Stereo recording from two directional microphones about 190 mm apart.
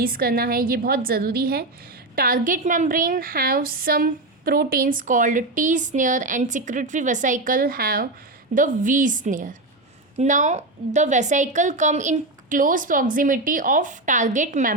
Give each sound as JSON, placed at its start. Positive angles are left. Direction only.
{"t": 0.0, "sound": "a woman's voice", "side_deg": -50}